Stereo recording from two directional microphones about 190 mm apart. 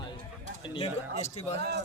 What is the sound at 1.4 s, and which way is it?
Speech, 35° left (ahead or behind).